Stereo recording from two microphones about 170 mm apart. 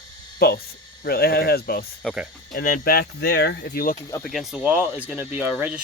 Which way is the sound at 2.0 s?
5° right (ahead or behind).